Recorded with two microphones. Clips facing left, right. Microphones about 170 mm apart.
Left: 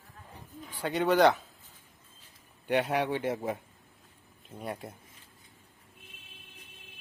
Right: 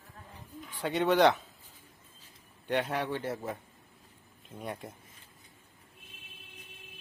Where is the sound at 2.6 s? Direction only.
10° left (ahead or behind).